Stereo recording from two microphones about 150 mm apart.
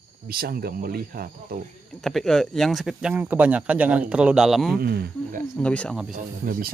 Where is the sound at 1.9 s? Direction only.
Centre (ahead or behind).